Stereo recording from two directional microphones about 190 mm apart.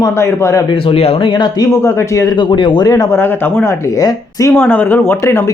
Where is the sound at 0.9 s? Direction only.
30° left (ahead or behind).